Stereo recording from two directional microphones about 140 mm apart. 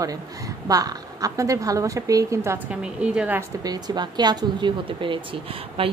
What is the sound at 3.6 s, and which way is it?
Speech, 30° right (ahead or behind).